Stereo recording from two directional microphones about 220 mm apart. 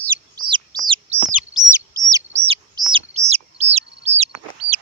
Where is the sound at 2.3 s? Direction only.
25° right (ahead or behind).